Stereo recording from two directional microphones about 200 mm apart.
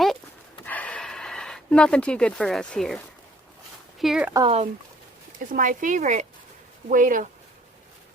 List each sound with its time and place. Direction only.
0.6 s a sound: 10° left (ahead or behind)
4.0 s speech: 5° right (ahead or behind)
4.4 s speech: 30° right (ahead or behind)
5.4 s speech: 40° right (ahead or behind)